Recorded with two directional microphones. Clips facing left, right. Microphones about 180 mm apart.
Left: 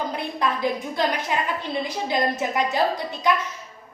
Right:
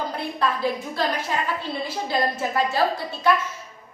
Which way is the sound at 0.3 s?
15° left (ahead or behind).